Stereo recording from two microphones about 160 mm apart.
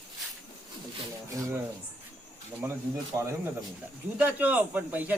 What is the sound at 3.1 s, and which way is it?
Speech, 20° right (ahead or behind).